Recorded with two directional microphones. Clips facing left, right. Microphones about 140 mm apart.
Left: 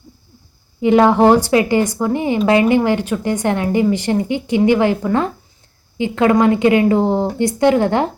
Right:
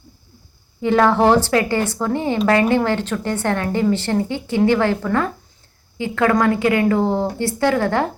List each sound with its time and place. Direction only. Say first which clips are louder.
0.8 s speech: left 4 dB; 15° left (ahead or behind)